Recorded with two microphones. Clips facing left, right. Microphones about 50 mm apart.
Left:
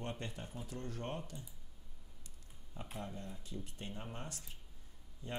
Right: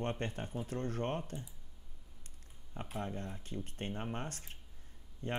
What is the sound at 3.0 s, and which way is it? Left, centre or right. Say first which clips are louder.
Speech: right 6 dB; right.